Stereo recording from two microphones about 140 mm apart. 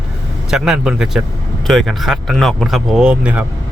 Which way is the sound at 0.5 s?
5° right (ahead or behind).